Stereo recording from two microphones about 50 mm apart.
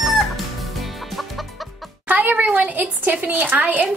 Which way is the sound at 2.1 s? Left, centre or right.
Right.